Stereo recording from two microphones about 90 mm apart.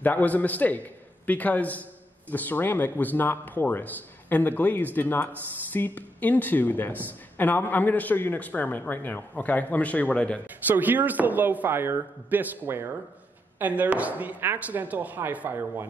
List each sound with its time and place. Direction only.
0.0 s a man's voice: 20° left (ahead or behind)
10.7 s a man's voice: 20° right (ahead or behind)